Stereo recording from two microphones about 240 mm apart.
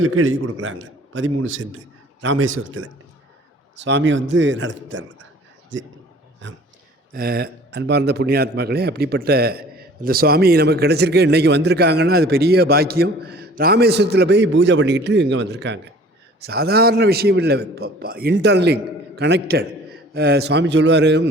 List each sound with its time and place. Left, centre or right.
0.0 s a man's voice: right
7.1 s a man's voice: right